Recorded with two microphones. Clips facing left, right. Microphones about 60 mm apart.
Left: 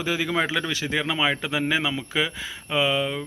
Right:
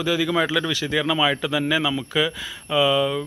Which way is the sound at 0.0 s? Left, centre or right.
Left.